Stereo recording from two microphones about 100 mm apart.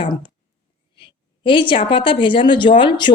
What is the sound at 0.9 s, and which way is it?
A woman's voice, 55° left (ahead or behind).